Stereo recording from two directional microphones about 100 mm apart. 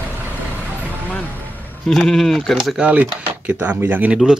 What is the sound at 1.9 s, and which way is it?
Speech, centre (ahead or behind).